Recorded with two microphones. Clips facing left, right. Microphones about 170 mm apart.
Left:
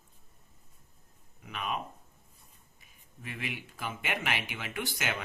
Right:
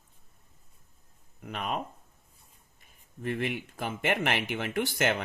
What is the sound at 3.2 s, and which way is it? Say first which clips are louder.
Speech: right 9 dB; 50° right (ahead or behind).